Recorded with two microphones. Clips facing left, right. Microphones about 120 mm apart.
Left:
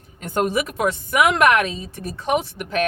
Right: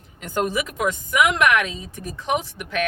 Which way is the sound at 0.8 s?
35° left (ahead or behind).